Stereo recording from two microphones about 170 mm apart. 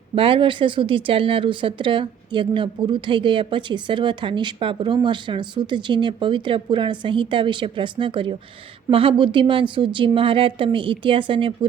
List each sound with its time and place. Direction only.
0.2 s speech: 30° right (ahead or behind)